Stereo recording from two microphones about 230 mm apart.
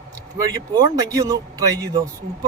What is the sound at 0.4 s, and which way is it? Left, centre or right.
A man's voice, centre.